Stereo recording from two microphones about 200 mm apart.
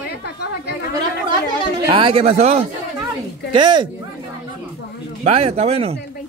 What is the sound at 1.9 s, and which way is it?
Speech, 25° right (ahead or behind).